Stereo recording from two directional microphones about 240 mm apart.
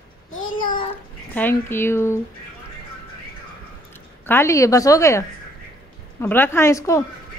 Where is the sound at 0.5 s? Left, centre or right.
Left.